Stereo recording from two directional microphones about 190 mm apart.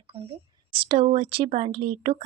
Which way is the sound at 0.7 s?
25° right (ahead or behind).